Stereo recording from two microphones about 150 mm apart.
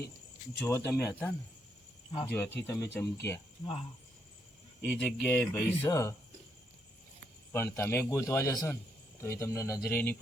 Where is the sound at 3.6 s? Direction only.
40° left (ahead or behind).